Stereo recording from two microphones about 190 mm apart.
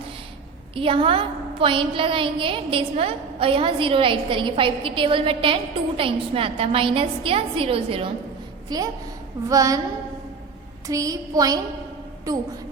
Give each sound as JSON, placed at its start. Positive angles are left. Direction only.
{"t": 0.8, "sound": "a woman's voice", "side_deg": -30}
{"t": 10.8, "sound": "a woman's voice", "side_deg": -15}